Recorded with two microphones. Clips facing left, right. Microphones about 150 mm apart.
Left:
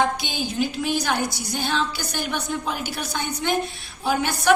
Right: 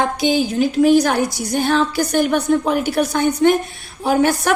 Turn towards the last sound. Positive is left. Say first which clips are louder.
# right 5 dB
turn(degrees=-60)  # may be behind; listen again after turning